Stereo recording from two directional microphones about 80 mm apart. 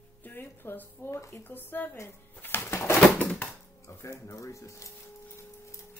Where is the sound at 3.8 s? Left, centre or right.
Left.